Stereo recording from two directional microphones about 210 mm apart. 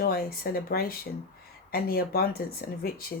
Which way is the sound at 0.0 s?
45° left (ahead or behind).